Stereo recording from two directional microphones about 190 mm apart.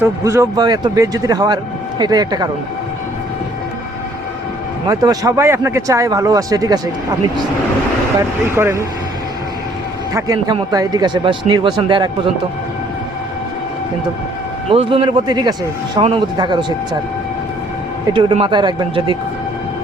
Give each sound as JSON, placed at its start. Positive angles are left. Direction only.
{"t": 0.0, "sound": "a man's voice", "side_deg": -15}
{"t": 4.9, "sound": "speech", "side_deg": -20}
{"t": 8.5, "sound": "speech", "side_deg": -15}
{"t": 10.2, "sound": "a man's voice", "side_deg": -20}
{"t": 14.7, "sound": "a man's voice", "side_deg": -30}
{"t": 18.1, "sound": "a man's voice", "side_deg": -25}